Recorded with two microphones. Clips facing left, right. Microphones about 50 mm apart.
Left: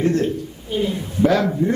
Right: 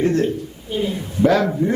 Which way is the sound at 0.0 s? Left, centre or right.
Centre.